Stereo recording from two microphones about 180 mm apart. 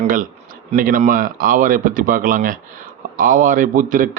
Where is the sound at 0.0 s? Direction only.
50° right (ahead or behind).